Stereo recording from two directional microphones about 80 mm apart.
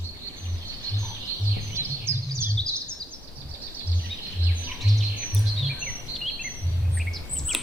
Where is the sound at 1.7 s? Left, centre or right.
Right.